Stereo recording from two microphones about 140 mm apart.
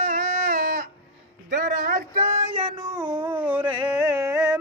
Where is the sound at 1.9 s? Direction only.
90° right.